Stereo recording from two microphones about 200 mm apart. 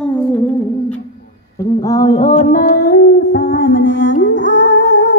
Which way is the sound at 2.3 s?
40° left (ahead or behind).